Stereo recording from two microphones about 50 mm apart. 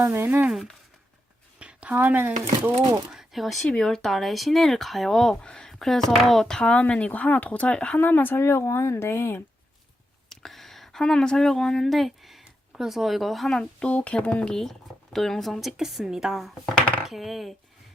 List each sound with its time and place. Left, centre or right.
0.0 s speech: right
1.5 s a sound: right
2.0 s speech: right
3.1 s speech: centre
3.7 s speech: centre
6.6 s speech: left
7.9 s speech: left
9.1 s speech: left
10.2 s speech: centre
13.5 s speech: centre
13.8 s speech: left
14.5 s speech: centre